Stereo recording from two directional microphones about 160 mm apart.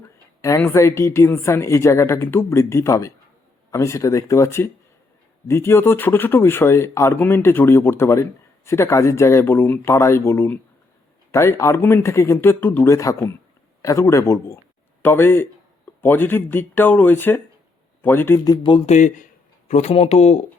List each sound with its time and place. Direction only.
0.6 s speech: 15° left (ahead or behind)
18.4 s speech: 25° left (ahead or behind)
18.9 s speech: 50° left (ahead or behind)